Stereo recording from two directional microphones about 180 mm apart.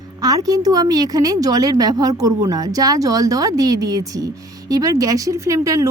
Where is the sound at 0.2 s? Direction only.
20° right (ahead or behind).